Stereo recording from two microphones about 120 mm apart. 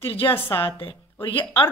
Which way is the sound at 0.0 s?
50° left (ahead or behind).